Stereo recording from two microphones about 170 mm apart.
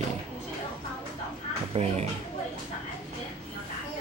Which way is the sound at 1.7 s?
40° right (ahead or behind).